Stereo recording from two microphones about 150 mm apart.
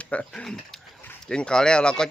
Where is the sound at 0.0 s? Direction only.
10° left (ahead or behind).